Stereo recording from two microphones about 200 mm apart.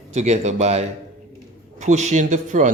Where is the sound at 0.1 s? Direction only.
35° right (ahead or behind).